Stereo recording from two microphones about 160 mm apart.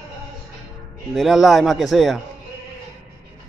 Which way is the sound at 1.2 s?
Centre (ahead or behind).